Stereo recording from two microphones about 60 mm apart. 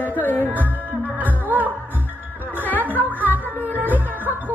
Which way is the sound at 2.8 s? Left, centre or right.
Right.